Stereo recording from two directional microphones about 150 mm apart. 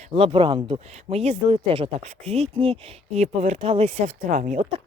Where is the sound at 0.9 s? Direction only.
45° right (ahead or behind).